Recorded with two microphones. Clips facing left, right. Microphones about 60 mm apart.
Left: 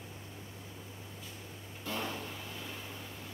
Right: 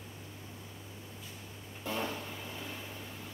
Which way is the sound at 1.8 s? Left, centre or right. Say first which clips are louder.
Right 2 dB; centre.